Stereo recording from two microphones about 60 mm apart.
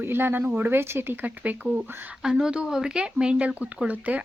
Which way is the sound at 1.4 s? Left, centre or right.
Right.